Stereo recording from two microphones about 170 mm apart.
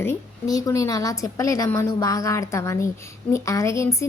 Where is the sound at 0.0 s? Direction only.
15° left (ahead or behind).